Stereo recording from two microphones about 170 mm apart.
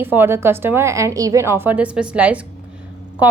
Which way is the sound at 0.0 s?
10° right (ahead or behind).